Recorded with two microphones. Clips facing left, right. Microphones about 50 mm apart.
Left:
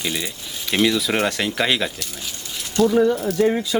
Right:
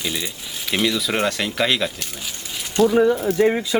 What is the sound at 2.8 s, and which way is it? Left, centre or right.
Speech, right.